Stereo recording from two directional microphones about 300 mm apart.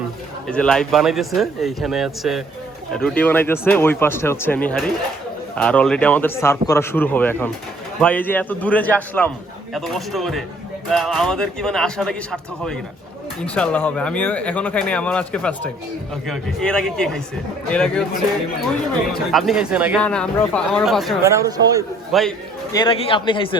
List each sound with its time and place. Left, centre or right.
0.4 s a man's voice: centre
19.3 s speech: centre
22.7 s a man's voice: centre